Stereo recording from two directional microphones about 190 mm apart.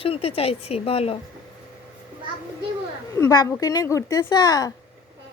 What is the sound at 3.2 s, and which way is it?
Speech, 15° left (ahead or behind).